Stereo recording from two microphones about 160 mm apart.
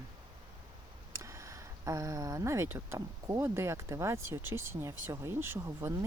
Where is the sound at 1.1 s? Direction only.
20° right (ahead or behind).